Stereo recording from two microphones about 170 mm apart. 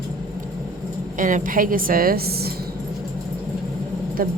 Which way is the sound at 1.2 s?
50° right (ahead or behind).